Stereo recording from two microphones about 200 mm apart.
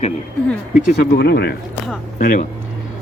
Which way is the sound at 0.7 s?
50° left (ahead or behind).